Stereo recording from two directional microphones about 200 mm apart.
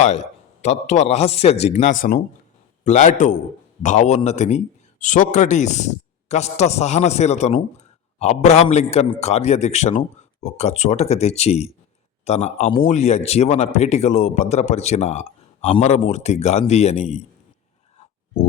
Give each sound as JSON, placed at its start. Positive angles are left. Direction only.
{"t": 0.0, "sound": "speech", "side_deg": 35}